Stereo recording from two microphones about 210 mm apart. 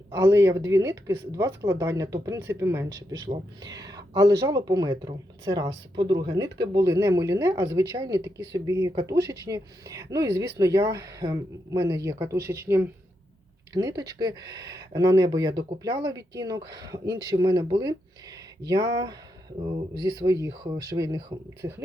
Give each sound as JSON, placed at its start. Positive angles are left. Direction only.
{"t": 0.2, "sound": "speech", "side_deg": -15}
{"t": 19.6, "sound": "speech", "side_deg": -20}